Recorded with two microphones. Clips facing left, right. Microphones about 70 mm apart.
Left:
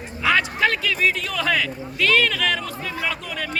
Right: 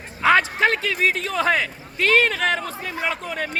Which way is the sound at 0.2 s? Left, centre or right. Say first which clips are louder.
Right 3 dB; right.